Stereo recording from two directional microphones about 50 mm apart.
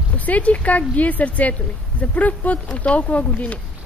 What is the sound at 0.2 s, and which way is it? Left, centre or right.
Speech, left.